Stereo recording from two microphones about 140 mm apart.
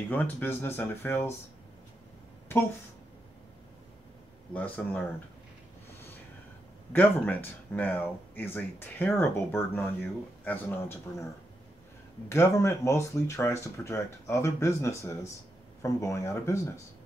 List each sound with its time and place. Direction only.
0.1 s speech: 15° left (ahead or behind)
4.6 s speech: 10° left (ahead or behind)
6.9 s speech: 15° left (ahead or behind)
12.3 s speech: 20° left (ahead or behind)